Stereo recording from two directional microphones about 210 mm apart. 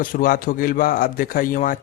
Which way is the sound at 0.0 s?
40° left (ahead or behind).